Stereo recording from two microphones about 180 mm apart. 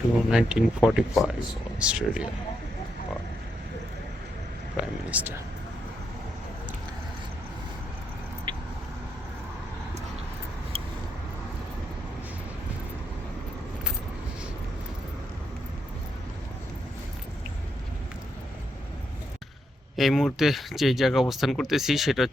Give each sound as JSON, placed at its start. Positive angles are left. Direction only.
{"t": 0.3, "sound": "speech", "side_deg": -5}
{"t": 5.1, "sound": "speech", "side_deg": -10}
{"t": 8.5, "sound": "a sound", "side_deg": -25}
{"t": 20.0, "sound": "speech", "side_deg": 0}